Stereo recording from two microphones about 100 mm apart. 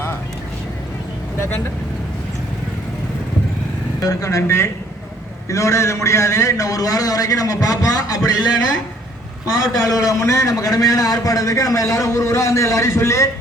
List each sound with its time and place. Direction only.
4.0 s a man's voice: 35° left (ahead or behind)
9.5 s a man's voice: 35° left (ahead or behind)